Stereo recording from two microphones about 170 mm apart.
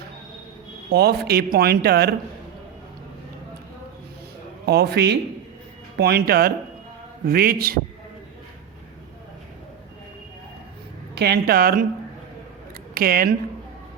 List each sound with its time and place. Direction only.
0.9 s speech: 70° right (ahead or behind)
4.6 s a woman's voice: 70° right (ahead or behind)
11.1 s a woman's voice: 70° right (ahead or behind)
12.9 s speech: 60° right (ahead or behind)